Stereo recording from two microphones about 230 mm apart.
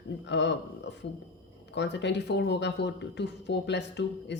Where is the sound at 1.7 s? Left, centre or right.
Left.